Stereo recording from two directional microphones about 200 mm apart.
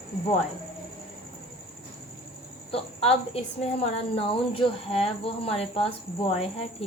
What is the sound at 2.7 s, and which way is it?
Speech, 30° left (ahead or behind).